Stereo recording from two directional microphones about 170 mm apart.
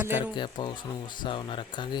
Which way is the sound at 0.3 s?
25° left (ahead or behind).